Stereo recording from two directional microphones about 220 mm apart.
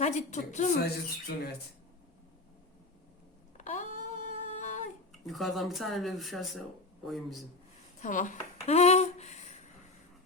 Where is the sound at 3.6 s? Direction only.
35° left (ahead or behind).